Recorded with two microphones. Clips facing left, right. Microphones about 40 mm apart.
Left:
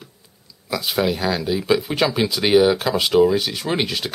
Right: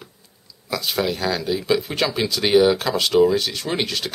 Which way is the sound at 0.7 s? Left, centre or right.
Centre.